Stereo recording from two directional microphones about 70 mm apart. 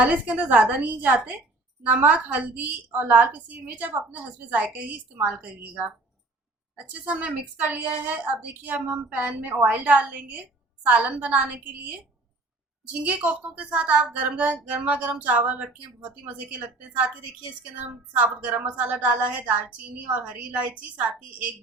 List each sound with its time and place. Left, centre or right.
0.0 s a woman's voice: right
7.0 s a woman's voice: right
13.1 s a woman's voice: right
18.1 s a woman's voice: right